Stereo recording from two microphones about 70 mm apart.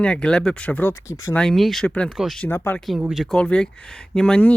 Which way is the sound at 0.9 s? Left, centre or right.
Left.